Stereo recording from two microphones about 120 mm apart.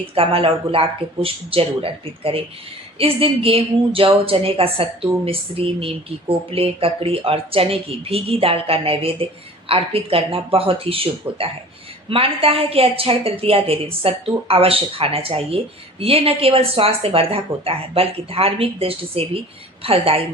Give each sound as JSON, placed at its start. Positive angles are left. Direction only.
{"t": 0.0, "sound": "a woman's voice", "side_deg": -50}